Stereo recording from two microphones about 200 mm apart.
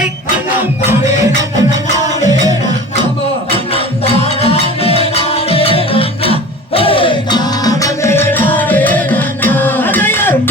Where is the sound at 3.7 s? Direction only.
30° left (ahead or behind).